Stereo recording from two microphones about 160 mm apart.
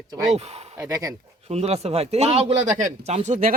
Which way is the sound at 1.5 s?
40° right (ahead or behind).